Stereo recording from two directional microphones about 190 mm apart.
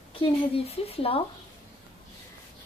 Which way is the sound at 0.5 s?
30° left (ahead or behind).